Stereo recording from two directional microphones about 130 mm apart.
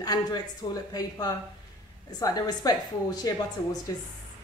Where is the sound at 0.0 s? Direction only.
30° left (ahead or behind).